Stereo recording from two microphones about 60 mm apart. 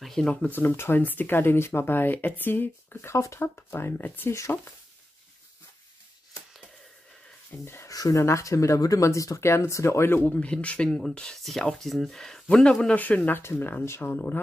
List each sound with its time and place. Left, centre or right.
0.0 s a sound: centre
0.5 s speech: left
3.1 s speech: left
3.3 s speech: left
7.6 s speech: left
7.9 s speech: left
8.2 s speech: left
9.4 s speech: left
10.2 s speech: centre
12.9 s speech: left
13.4 s speech: left